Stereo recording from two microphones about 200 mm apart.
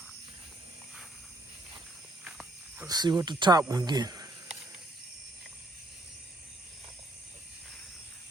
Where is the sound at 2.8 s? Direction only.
20° right (ahead or behind).